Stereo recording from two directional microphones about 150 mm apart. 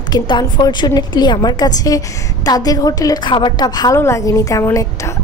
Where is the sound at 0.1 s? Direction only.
30° left (ahead or behind).